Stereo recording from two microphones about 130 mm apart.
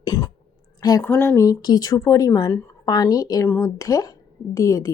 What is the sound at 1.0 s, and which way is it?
A woman's voice, 15° left (ahead or behind).